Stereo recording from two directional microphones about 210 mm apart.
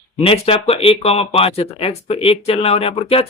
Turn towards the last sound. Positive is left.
turn(degrees=30)  # may be behind; listen again after turning